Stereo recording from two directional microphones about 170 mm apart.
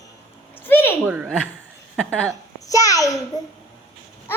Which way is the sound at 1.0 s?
10° right (ahead or behind).